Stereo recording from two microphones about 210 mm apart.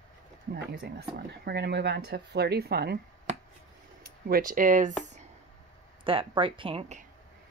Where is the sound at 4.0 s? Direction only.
45° right (ahead or behind).